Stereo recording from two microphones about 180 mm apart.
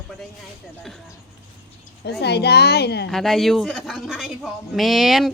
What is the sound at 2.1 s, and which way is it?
A woman's voice, 65° left (ahead or behind).